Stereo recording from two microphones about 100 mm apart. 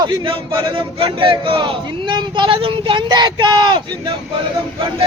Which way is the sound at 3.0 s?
50° right (ahead or behind).